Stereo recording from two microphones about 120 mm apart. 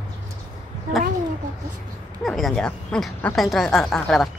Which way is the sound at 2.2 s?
Centre (ahead or behind).